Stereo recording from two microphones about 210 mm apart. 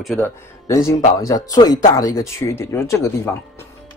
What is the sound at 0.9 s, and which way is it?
Speech, 15° left (ahead or behind).